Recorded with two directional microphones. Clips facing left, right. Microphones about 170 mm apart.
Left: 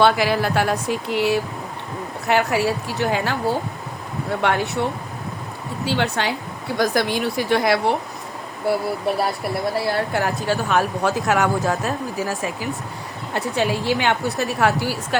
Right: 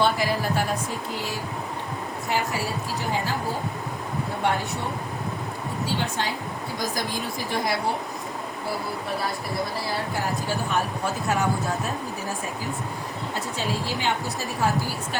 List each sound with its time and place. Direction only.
0.0 s speech: 75° left (ahead or behind)
4.4 s speech: 70° left (ahead or behind)
5.8 s speech: 70° left (ahead or behind)
9.0 s speech: 65° left (ahead or behind); by 12.5 s 90° left
13.3 s speech: 65° left (ahead or behind)